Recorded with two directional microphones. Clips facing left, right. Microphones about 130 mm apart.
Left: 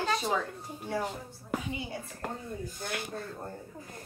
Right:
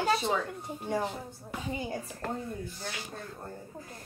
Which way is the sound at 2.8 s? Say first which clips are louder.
Left 3 dB; 55° left (ahead or behind).